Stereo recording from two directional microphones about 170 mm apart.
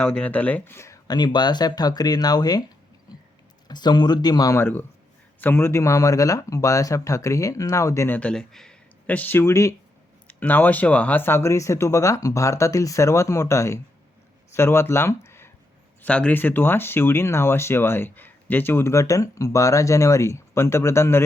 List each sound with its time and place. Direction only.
0.0 s speech: 10° left (ahead or behind); by 2.6 s 25° left (ahead or behind)
3.7 s speech: 25° left (ahead or behind)